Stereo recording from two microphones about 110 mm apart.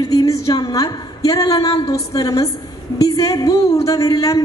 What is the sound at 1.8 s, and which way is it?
A woman's voice, 35° left (ahead or behind).